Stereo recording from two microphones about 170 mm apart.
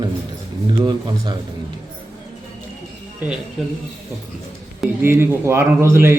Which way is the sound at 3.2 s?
10° right (ahead or behind).